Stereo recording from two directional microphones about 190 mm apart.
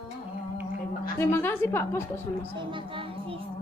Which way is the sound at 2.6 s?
25° right (ahead or behind).